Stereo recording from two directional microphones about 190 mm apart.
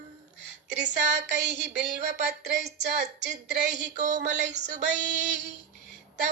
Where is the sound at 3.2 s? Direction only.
60° right (ahead or behind).